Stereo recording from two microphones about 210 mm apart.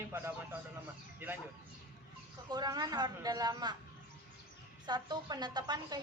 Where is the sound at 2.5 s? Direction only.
20° right (ahead or behind).